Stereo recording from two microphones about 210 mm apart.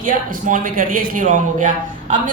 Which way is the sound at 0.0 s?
40° right (ahead or behind).